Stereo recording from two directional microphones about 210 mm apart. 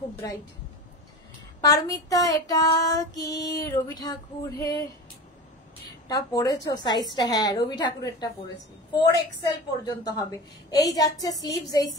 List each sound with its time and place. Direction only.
0.2 s female singing: 15° left (ahead or behind)
1.6 s female singing: 15° left (ahead or behind)
6.0 s a woman's voice: 20° left (ahead or behind)
9.1 s female singing: 15° left (ahead or behind)